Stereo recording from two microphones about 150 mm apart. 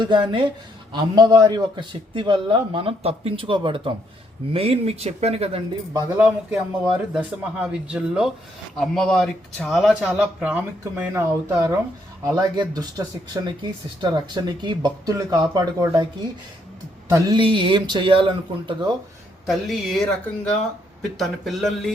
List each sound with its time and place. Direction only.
0.0 s a man's voice: 30° right (ahead or behind)
6.1 s speech: 10° right (ahead or behind)
12.4 s speech: 25° right (ahead or behind)
17.1 s a man's voice: 30° right (ahead or behind)
19.5 s speech: centre (ahead or behind)